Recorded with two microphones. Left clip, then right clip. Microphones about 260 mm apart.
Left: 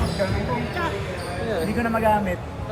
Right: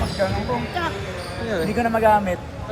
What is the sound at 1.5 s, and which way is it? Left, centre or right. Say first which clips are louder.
Speech: right 3 dB; right.